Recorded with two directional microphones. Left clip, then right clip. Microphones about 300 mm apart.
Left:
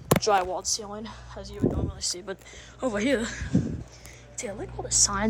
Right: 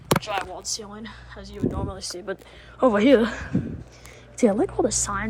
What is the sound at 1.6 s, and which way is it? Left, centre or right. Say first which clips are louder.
A woman's voice: even; centre.